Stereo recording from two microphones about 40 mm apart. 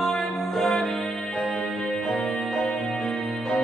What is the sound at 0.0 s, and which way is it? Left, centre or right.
Music, centre.